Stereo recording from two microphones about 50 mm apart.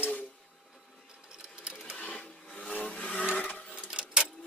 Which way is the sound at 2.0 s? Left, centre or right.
Centre.